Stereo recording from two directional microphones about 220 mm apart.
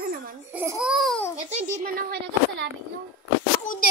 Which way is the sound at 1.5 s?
35° right (ahead or behind).